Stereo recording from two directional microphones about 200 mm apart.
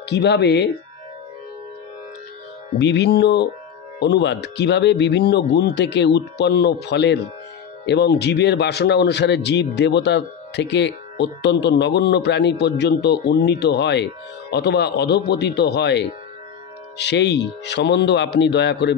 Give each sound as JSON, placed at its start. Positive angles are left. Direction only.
{"t": 0.0, "sound": "a man's voice", "side_deg": 60}
{"t": 2.8, "sound": "a man's voice", "side_deg": 60}